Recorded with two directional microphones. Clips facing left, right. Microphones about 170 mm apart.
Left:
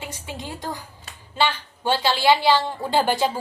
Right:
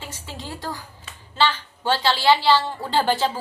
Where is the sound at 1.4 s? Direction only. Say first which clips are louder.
Right 1 dB; 15° left (ahead or behind).